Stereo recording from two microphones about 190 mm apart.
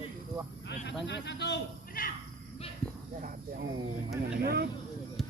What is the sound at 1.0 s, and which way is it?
Speech, 65° left (ahead or behind).